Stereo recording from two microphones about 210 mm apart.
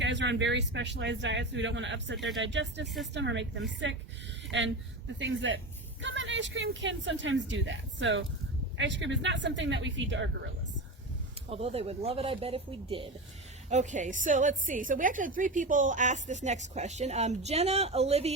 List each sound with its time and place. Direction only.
0.0 s a woman's voice: 55° right (ahead or behind)
5.2 s a woman's voice: 60° right (ahead or behind)
11.4 s a woman's voice: 30° right (ahead or behind)